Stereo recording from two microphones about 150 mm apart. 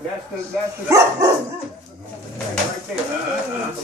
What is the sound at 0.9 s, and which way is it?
Speech, 20° right (ahead or behind).